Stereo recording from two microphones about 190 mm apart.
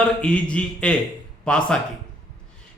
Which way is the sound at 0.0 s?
5° left (ahead or behind).